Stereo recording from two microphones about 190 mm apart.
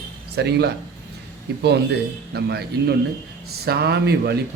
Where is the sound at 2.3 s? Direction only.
60° right (ahead or behind).